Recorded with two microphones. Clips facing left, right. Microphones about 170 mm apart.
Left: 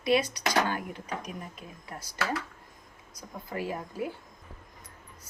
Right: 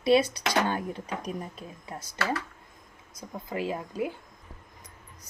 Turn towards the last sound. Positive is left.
turn(degrees=-20)  # may be behind; listen again after turning